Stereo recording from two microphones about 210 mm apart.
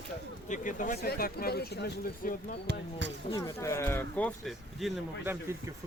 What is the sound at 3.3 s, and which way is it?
Speech, 15° left (ahead or behind).